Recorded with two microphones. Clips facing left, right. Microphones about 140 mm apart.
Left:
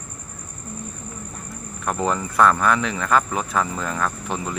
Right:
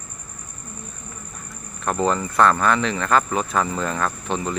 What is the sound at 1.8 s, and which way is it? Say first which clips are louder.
Speech: right 2 dB; 10° left (ahead or behind).